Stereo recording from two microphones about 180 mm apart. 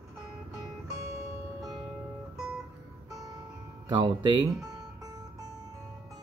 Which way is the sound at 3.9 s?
25° right (ahead or behind).